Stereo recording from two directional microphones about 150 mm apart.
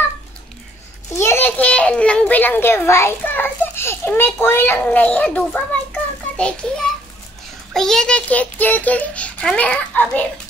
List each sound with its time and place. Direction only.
1.1 s a child's voice: 15° left (ahead or behind)